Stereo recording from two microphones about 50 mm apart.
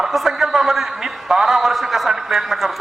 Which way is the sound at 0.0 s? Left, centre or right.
Centre.